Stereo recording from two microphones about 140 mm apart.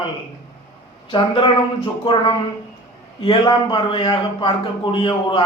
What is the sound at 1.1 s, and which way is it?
Speech, 40° left (ahead or behind).